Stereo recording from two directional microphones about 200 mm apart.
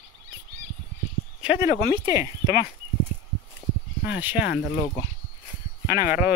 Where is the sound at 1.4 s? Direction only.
5° right (ahead or behind).